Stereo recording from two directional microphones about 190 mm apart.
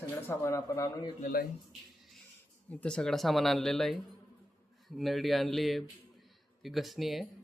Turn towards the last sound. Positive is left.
turn(degrees=0)  # may be behind; listen again after turning